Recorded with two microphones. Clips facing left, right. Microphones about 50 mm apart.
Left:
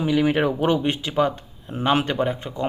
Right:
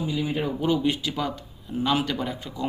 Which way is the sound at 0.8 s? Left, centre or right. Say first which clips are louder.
Left 5 dB; left.